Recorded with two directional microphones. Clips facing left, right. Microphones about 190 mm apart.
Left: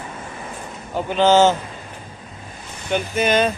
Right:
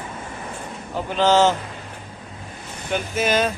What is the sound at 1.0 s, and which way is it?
Speech, centre (ahead or behind).